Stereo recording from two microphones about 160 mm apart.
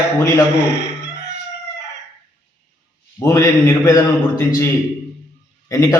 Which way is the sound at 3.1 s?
20° left (ahead or behind).